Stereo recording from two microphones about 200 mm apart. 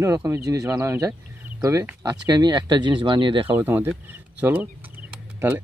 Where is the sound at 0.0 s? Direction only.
15° right (ahead or behind).